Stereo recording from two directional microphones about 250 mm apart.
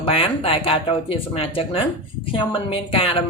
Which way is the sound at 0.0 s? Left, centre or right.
Left.